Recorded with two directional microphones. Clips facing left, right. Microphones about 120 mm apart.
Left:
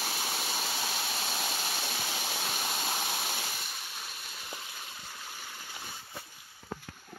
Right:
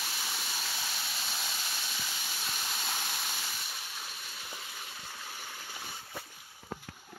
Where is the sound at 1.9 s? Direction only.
60° left (ahead or behind).